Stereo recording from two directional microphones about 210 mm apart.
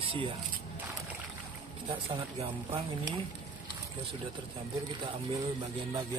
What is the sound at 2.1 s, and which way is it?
Speech, 25° right (ahead or behind).